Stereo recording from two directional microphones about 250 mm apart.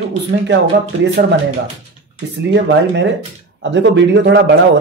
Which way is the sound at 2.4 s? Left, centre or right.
Right.